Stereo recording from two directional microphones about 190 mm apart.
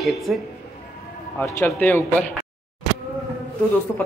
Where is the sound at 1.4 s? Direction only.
15° left (ahead or behind).